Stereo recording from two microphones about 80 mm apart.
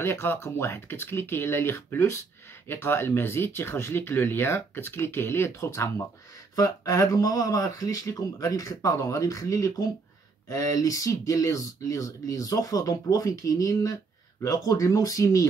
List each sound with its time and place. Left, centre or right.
0.0 s speech: left